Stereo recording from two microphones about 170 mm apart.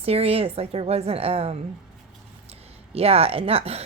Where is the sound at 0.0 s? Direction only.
35° right (ahead or behind).